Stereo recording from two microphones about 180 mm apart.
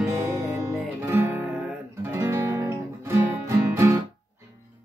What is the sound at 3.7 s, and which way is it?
Music, 15° right (ahead or behind).